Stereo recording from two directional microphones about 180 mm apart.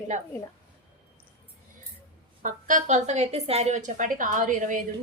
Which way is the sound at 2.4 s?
45° right (ahead or behind).